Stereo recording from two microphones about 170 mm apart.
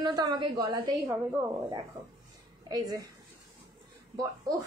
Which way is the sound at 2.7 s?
20° right (ahead or behind).